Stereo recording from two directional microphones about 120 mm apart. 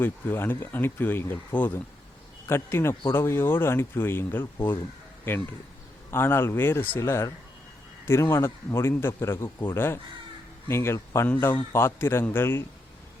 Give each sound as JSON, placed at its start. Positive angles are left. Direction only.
{"t": 0.0, "sound": "speech", "side_deg": 15}
{"t": 6.1, "sound": "speech", "side_deg": 20}